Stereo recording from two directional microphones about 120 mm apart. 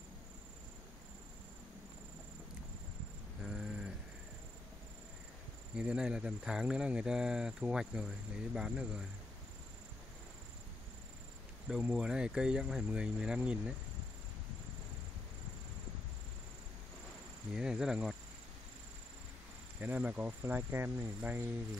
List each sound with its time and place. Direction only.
3.4 s a sound: 5° right (ahead or behind)
5.8 s speech: 10° right (ahead or behind)
11.7 s speech: 10° right (ahead or behind)
17.6 s speech: 5° right (ahead or behind)
19.8 s speech: 15° right (ahead or behind)